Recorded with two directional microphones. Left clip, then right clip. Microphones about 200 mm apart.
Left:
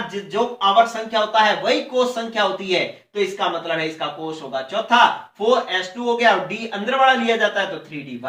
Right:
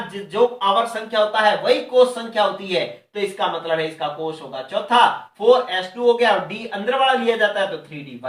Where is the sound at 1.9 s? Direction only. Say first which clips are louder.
Right 4 dB; 25° right (ahead or behind).